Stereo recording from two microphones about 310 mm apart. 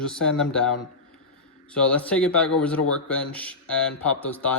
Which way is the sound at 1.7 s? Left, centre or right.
Centre.